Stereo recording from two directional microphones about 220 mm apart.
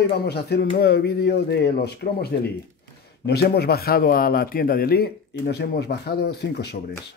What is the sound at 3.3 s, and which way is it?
Speech, 45° left (ahead or behind).